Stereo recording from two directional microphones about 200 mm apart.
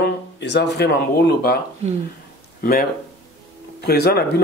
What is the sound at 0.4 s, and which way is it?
Speech, 60° left (ahead or behind).